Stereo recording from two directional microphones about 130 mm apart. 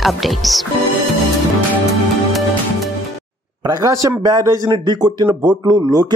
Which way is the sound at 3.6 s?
30° right (ahead or behind).